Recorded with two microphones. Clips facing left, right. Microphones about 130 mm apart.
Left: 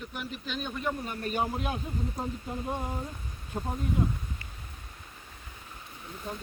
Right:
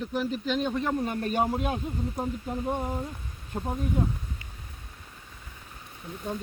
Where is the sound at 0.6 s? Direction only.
90° right.